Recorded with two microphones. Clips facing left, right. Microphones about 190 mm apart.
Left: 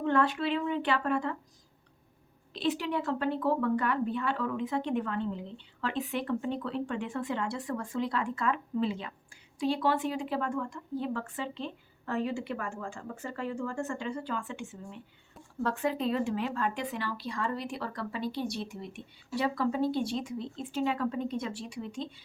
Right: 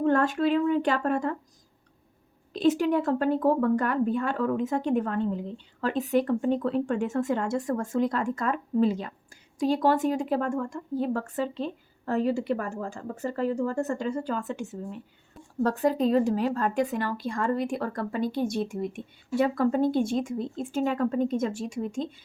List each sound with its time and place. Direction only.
0.0 s speech: 45° right (ahead or behind)
2.5 s speech: 45° right (ahead or behind)